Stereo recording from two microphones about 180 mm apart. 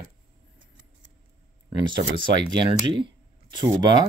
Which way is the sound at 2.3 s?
25° right (ahead or behind).